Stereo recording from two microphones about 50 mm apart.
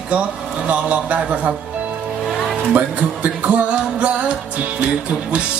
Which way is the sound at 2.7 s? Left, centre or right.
Right.